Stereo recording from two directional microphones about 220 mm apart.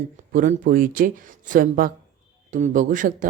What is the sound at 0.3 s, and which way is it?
A woman's voice, 40° right (ahead or behind).